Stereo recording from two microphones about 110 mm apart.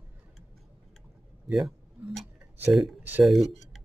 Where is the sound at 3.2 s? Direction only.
Centre (ahead or behind).